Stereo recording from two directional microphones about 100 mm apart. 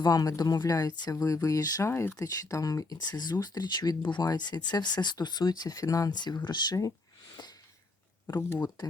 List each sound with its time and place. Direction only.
0.0 s speech: 40° left (ahead or behind)
1.9 s speech: 25° left (ahead or behind)
7.4 s a sound: 45° left (ahead or behind)
8.4 s speech: 20° left (ahead or behind)